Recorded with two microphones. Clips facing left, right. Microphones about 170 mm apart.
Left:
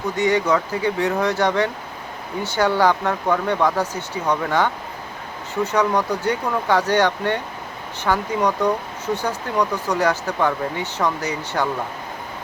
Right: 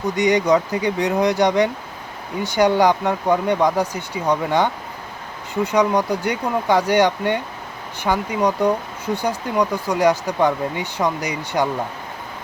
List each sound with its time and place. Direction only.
0.2 s speech: 15° right (ahead or behind)